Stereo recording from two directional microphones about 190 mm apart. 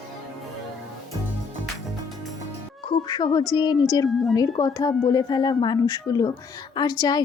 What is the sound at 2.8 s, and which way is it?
A woman's voice, 25° left (ahead or behind).